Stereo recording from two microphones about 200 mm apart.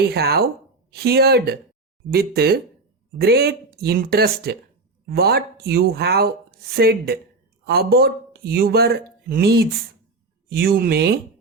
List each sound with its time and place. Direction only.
0.0 s speech: 55° right (ahead or behind)